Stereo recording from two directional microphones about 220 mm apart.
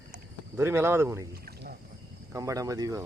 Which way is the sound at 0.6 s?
10° right (ahead or behind).